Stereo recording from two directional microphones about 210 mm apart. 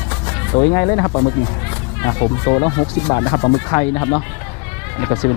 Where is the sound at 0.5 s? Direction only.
20° left (ahead or behind).